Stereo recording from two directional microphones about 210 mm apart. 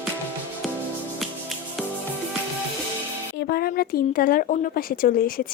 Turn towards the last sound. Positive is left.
turn(degrees=45)  # may be behind; listen again after turning